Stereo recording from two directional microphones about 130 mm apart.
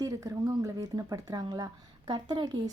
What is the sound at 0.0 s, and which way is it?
A woman's voice, 25° right (ahead or behind).